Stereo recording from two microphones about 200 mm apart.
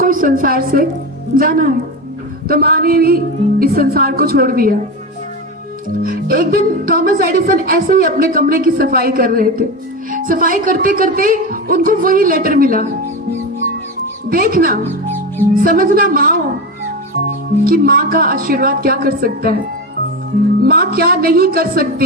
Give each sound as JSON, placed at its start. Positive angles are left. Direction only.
{"t": 0.0, "sound": "a woman's voice", "side_deg": -45}
{"t": 6.0, "sound": "a woman's voice", "side_deg": -45}
{"t": 14.3, "sound": "a woman's voice", "side_deg": -45}
{"t": 17.7, "sound": "a woman's voice", "side_deg": -45}
{"t": 20.7, "sound": "a woman's voice", "side_deg": -50}